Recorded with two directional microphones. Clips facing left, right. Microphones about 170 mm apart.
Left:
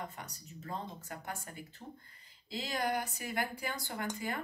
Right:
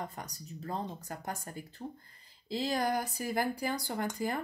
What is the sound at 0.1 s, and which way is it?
Speech, 40° right (ahead or behind).